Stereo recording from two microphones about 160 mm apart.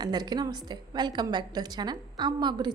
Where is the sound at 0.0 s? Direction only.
25° right (ahead or behind).